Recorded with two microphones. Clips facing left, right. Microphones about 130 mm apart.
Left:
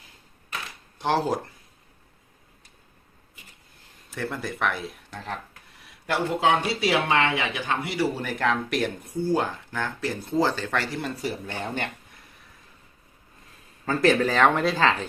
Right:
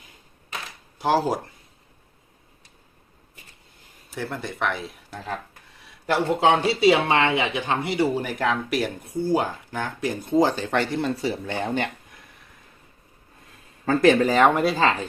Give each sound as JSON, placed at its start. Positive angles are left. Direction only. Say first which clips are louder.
{"t": 0.9, "sound": "speech", "louder": "right 2 dB", "side_deg": -5}
{"t": 4.1, "sound": "speech", "louder": "even", "side_deg": 0}
{"t": 6.1, "sound": "speech", "louder": "right 3 dB", "side_deg": -30}
{"t": 14.0, "sound": "speech", "louder": "right 3 dB", "side_deg": -15}